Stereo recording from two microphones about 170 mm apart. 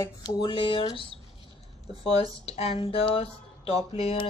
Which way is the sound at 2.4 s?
35° left (ahead or behind).